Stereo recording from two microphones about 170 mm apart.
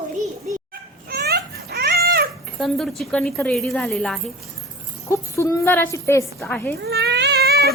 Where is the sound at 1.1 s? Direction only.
70° right (ahead or behind).